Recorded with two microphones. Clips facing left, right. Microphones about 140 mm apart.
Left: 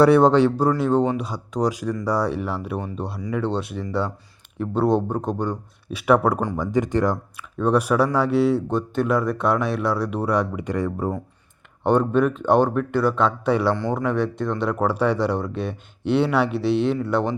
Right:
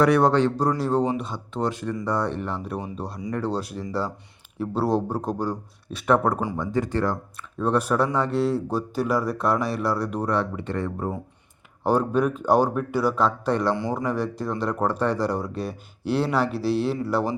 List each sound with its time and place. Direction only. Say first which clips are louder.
0.0 s a man's voice: left 4 dB; 25° left (ahead or behind); by 1.1 s centre (ahead or behind)
1.2 s a man's voice: left 4 dB; 10° left (ahead or behind)
6.7 s a man's voice: left 4 dB; 20° left (ahead or behind)
7.6 s a man's voice: left 3 dB; centre (ahead or behind)
11.8 s a man's voice: left 3 dB; 5° right (ahead or behind)